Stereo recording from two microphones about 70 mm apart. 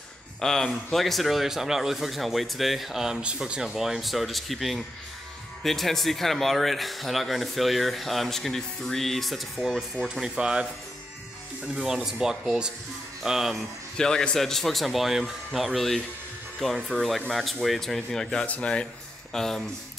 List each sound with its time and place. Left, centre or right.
0.4 s a man's voice: centre
13.9 s a man's voice: centre
19.3 s a man's voice: centre